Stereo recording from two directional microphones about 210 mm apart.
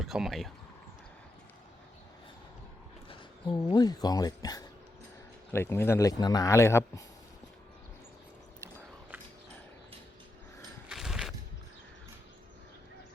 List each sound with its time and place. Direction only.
0.0 s speech: centre (ahead or behind)
3.1 s speech: 20° left (ahead or behind)
10.8 s a sound: centre (ahead or behind)